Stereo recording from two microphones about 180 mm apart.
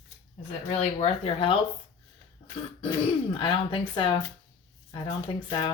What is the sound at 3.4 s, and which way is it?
Speech, 25° left (ahead or behind).